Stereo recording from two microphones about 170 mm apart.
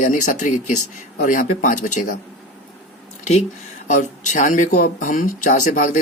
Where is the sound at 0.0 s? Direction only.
50° left (ahead or behind).